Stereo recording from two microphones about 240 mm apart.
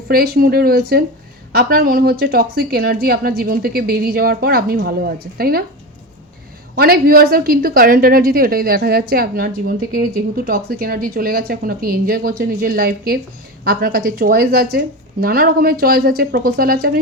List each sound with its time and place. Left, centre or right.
0.1 s a woman's voice: right
6.7 s a woman's voice: right